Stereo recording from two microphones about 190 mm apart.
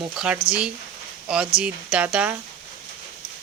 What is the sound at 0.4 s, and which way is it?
Speech, 15° left (ahead or behind).